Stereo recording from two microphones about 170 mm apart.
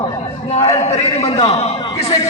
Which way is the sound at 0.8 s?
40° left (ahead or behind).